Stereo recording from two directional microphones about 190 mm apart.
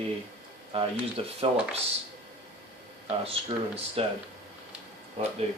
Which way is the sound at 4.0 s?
30° right (ahead or behind).